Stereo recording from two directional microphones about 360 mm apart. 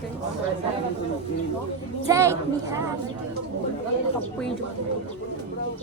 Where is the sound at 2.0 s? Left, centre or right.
Centre.